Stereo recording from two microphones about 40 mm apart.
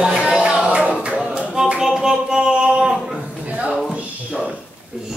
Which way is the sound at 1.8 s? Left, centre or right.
Centre.